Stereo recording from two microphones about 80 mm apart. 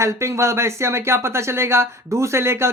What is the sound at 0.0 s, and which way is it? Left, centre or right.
Speech, right.